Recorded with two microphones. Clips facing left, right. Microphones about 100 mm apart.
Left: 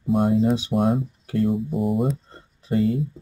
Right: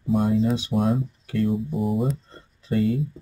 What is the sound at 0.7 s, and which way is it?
Speech, 15° left (ahead or behind).